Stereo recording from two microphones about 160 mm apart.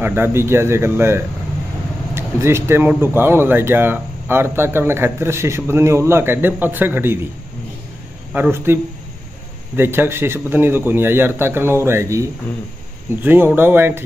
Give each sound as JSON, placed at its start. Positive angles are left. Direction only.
{"t": 0.0, "sound": "speech", "side_deg": -15}
{"t": 8.3, "sound": "a man's voice", "side_deg": -15}
{"t": 9.8, "sound": "speech", "side_deg": -15}